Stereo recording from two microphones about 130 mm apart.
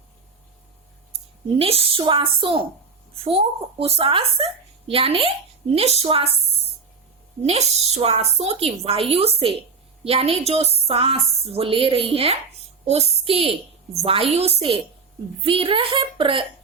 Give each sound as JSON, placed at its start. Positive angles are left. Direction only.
{"t": 1.5, "sound": "a woman's voice", "side_deg": -45}
{"t": 7.4, "sound": "a woman's voice", "side_deg": -55}